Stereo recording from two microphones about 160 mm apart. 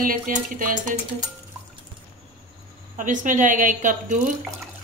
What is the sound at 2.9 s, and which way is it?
A woman's voice, 55° right (ahead or behind).